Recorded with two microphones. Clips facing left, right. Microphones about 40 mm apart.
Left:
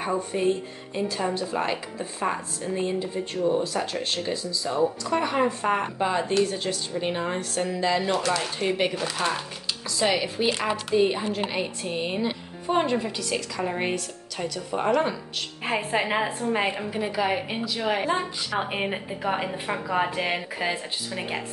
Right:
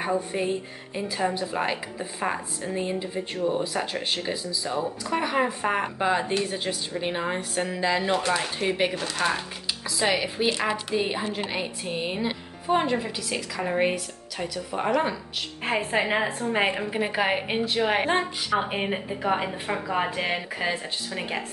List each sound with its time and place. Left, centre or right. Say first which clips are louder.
0.9 s a woman's voice: even; centre
8.5 s a woman's voice: even; centre
16.9 s a woman's voice: right 1 dB; right
18.6 s a woman's voice: even; centre